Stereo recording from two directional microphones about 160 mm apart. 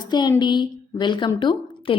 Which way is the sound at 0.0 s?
25° left (ahead or behind).